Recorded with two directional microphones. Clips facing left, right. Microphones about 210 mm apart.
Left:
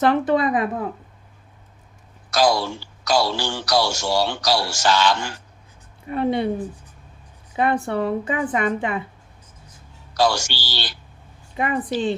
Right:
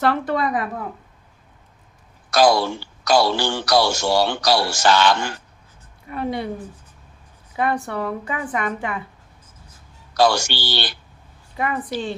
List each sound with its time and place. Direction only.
0.0 s a woman's voice: 20° left (ahead or behind)
2.3 s speech: 55° right (ahead or behind)
6.1 s a woman's voice: 25° left (ahead or behind)
7.5 s a woman's voice: 25° left (ahead or behind)
10.2 s speech: 55° right (ahead or behind)
11.5 s a woman's voice: 20° left (ahead or behind)